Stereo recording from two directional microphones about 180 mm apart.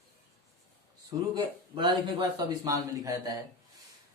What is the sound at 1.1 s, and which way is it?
Speech, 25° right (ahead or behind).